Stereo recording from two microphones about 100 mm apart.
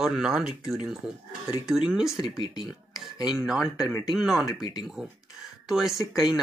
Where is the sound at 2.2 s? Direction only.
45° left (ahead or behind).